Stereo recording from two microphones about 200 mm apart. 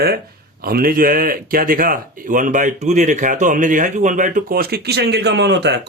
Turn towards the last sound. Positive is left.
turn(degrees=-55)  # may be behind; listen again after turning